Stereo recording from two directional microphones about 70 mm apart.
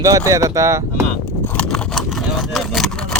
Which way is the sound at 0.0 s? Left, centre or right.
Right.